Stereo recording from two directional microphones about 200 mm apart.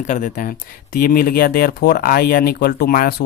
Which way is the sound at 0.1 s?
40° left (ahead or behind).